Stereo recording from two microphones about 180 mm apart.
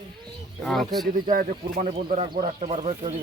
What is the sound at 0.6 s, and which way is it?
Speech, 5° left (ahead or behind).